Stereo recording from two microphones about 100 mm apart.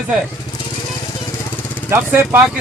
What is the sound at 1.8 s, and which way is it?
Speech, 25° right (ahead or behind).